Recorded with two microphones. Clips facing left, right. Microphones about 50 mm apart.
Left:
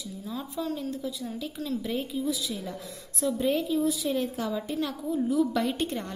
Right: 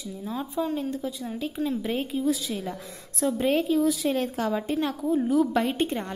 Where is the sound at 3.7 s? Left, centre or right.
Right.